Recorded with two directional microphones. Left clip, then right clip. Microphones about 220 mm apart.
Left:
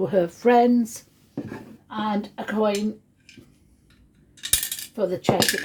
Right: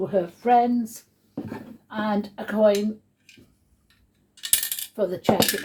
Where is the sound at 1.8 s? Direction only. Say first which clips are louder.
Even; 35° left (ahead or behind).